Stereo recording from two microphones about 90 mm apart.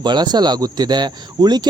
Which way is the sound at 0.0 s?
55° right (ahead or behind).